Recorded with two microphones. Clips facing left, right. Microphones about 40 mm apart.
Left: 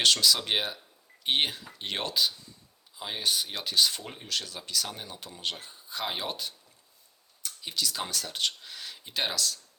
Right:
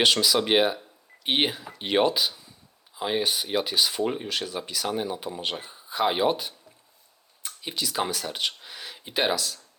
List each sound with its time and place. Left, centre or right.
0.0 s speech: centre